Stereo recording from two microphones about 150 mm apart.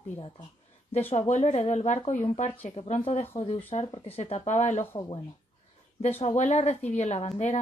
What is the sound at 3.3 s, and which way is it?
Speech, 40° left (ahead or behind).